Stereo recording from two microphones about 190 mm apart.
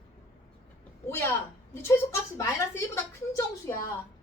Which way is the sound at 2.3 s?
15° left (ahead or behind).